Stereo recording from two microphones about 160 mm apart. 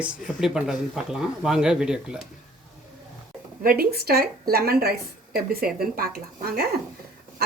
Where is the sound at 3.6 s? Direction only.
70° right (ahead or behind).